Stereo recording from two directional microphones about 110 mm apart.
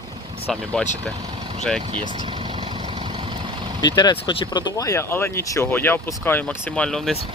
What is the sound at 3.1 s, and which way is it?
Vehicle, 45° right (ahead or behind).